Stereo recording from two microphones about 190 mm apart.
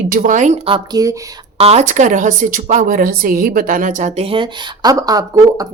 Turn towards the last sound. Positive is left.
turn(degrees=-20)  # may be behind; listen again after turning